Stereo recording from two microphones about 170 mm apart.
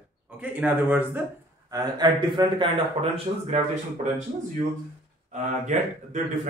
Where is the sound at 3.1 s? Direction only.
40° right (ahead or behind).